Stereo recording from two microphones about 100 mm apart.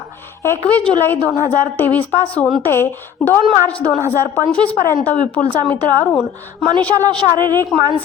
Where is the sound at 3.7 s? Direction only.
10° left (ahead or behind).